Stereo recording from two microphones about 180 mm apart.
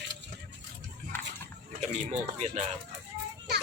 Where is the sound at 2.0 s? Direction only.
40° right (ahead or behind).